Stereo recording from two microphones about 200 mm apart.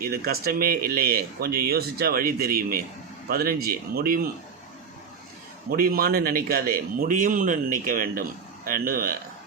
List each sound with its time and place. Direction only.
0.0 s speech: 50° right (ahead or behind)
5.7 s speech: 45° right (ahead or behind)